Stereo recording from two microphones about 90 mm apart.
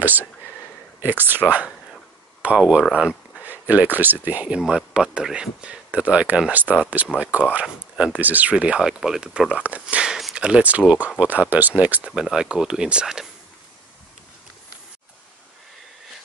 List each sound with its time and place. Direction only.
1.0 s speech: 20° right (ahead or behind)
2.4 s speech: 10° right (ahead or behind)
4.6 s speech: 10° right (ahead or behind)